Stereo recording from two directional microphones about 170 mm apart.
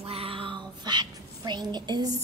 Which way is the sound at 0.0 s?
35° right (ahead or behind).